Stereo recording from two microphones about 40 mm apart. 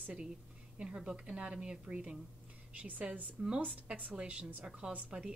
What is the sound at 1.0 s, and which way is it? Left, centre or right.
Speech, right.